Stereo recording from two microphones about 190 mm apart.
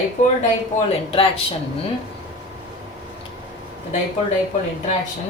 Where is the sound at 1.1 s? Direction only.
30° left (ahead or behind).